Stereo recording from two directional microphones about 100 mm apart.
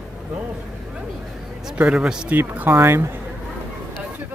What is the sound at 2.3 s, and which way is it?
Speech, 20° right (ahead or behind).